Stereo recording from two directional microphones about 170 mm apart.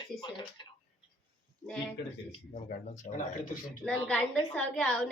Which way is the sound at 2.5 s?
45° left (ahead or behind).